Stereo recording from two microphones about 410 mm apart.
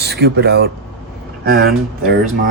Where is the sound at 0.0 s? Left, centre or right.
Right.